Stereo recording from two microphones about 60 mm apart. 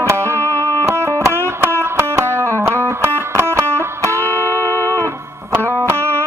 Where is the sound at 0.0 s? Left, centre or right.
Right.